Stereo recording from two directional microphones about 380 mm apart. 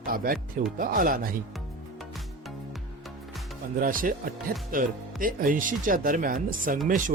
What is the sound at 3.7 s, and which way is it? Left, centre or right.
Speech, right.